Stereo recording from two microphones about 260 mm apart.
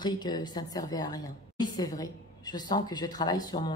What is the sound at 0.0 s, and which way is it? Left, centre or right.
A woman's voice, centre.